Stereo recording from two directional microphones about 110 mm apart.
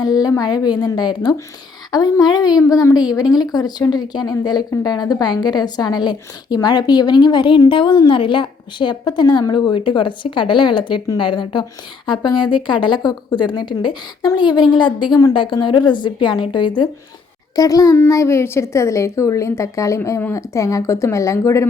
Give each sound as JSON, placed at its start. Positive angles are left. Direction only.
{"t": 0.0, "sound": "a woman's voice", "side_deg": 35}
{"t": 17.5, "sound": "a child's voice", "side_deg": 35}